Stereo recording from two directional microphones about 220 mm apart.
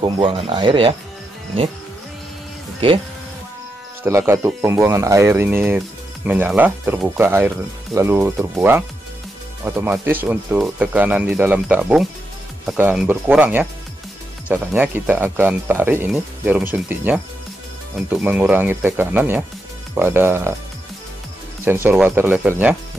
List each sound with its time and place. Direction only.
0.0 s speech: 25° right (ahead or behind)
2.8 s speech: 25° right (ahead or behind)
4.0 s speech: 10° right (ahead or behind)
21.6 s speech: 10° right (ahead or behind)